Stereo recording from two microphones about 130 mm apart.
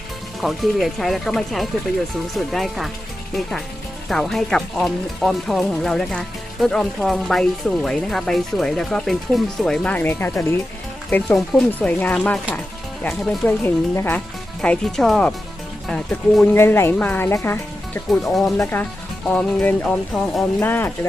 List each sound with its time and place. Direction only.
0.4 s speech: centre (ahead or behind)
4.1 s speech: centre (ahead or behind); by 10.6 s 15° left (ahead or behind)
11.3 s speech: 5° left (ahead or behind)
14.6 s speech: 5° left (ahead or behind)
16.6 s speech: 20° left (ahead or behind)
18.1 s speech: centre (ahead or behind)
18.7 s speech: 15° left (ahead or behind)
20.6 s speech: 15° left (ahead or behind)